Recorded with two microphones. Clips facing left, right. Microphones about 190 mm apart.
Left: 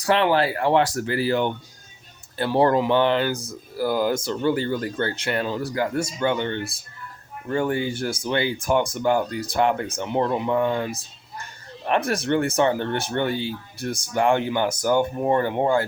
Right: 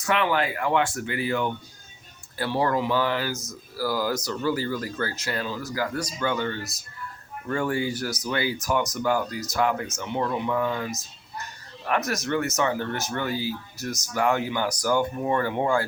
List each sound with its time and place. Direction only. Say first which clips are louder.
0.0 s speech: left 5 dB; 35° left (ahead or behind)